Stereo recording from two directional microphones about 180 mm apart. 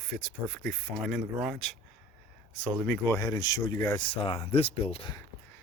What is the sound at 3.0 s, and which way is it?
Speech, 20° left (ahead or behind).